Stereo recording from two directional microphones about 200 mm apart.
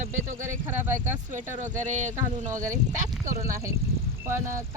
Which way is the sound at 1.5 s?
40° right (ahead or behind).